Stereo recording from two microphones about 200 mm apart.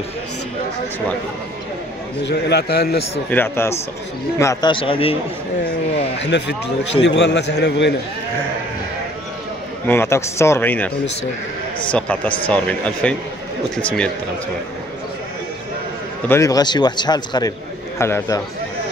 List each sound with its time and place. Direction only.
2.2 s a man's voice: 55° left (ahead or behind)
3.3 s a man's voice: 10° left (ahead or behind); by 5.1 s 25° left (ahead or behind)
6.1 s a man's voice: 60° left (ahead or behind)
9.8 s speech: 10° left (ahead or behind)
11.9 s speech: 5° left (ahead or behind)
16.3 s a man's voice: 15° left (ahead or behind)